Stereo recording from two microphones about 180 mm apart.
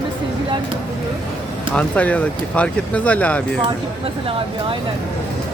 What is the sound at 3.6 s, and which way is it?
Speech, 30° right (ahead or behind).